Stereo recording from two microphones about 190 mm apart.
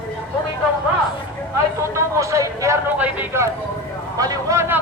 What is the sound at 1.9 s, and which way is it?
A man's voice, 15° right (ahead or behind).